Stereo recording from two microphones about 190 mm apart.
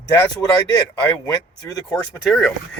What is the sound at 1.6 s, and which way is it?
Speech, 20° left (ahead or behind).